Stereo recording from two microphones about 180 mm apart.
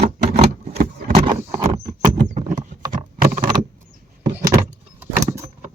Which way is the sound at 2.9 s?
45° right (ahead or behind).